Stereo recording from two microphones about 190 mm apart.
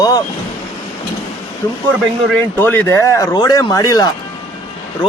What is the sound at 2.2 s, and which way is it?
Speech, 10° left (ahead or behind).